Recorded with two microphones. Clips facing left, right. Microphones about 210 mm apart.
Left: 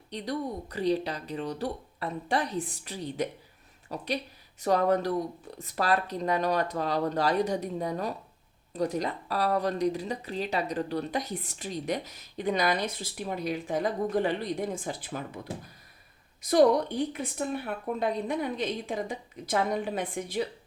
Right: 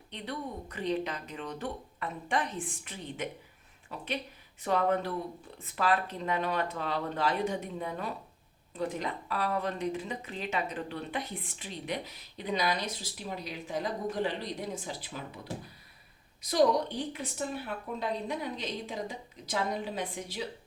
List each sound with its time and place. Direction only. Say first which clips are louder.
0.1 s speech: left 6 dB; 35° left (ahead or behind)
16.4 s a woman's voice: left 4 dB; 50° left (ahead or behind)